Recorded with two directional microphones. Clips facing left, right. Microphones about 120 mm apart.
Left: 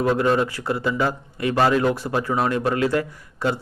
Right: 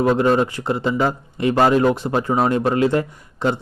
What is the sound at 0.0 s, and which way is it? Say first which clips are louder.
Speech: right 3 dB; 25° right (ahead or behind).